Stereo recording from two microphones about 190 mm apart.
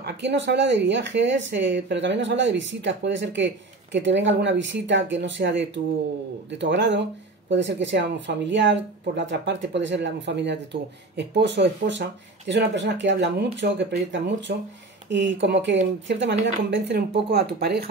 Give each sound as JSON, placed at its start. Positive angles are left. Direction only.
{"t": 0.0, "sound": "speech", "side_deg": -65}